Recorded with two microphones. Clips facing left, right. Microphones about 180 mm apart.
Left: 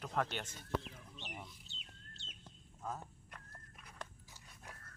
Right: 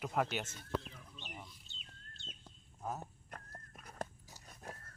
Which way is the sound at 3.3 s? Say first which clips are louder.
Right 5 dB; 45° right (ahead or behind).